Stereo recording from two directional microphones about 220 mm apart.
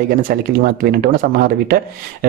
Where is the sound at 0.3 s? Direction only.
40° right (ahead or behind).